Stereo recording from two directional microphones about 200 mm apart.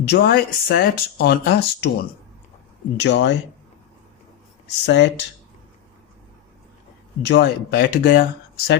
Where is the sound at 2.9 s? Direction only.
60° left (ahead or behind).